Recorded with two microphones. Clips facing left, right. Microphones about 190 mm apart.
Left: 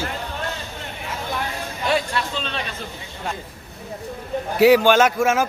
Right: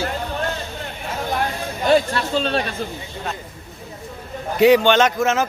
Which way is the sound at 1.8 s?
40° right (ahead or behind).